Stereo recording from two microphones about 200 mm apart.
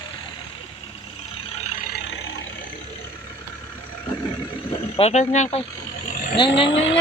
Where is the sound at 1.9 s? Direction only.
60° left (ahead or behind).